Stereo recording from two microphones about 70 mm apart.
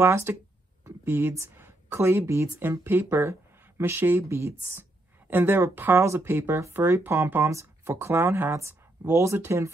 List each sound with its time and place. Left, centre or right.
0.0 s speech: right
7.9 s speech: right